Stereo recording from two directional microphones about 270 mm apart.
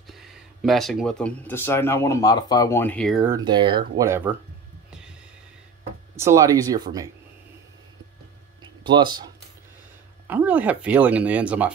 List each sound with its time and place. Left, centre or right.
0.0 s speech: centre
6.1 s speech: centre
8.8 s speech: centre